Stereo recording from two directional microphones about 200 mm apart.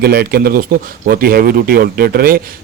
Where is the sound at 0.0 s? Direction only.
50° right (ahead or behind).